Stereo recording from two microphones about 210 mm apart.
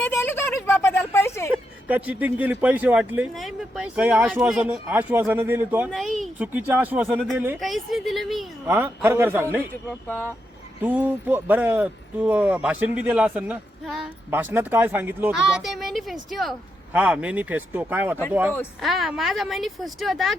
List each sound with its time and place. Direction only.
0.1 s a sound: 10° left (ahead or behind)
1.9 s speech: 10° right (ahead or behind)
10.8 s a woman's voice: 5° right (ahead or behind)